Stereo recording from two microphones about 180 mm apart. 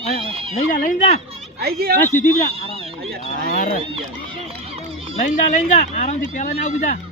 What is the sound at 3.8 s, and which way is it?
Run, 30° right (ahead or behind).